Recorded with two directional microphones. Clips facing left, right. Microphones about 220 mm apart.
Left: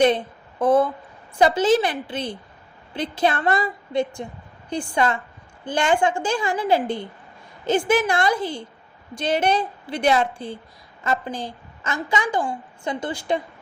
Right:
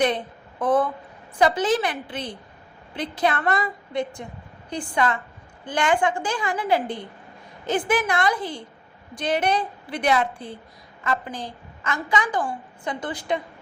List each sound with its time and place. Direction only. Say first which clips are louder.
0.6 s a woman's voice: left 3 dB; 25° left (ahead or behind)